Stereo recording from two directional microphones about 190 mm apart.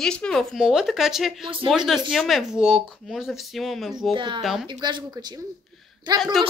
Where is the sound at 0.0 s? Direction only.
5° left (ahead or behind).